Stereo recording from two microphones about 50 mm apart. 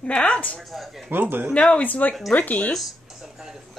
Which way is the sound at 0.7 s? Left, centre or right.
Centre.